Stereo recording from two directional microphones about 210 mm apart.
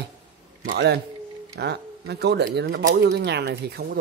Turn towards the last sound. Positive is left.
turn(degrees=-50)  # may be behind; listen again after turning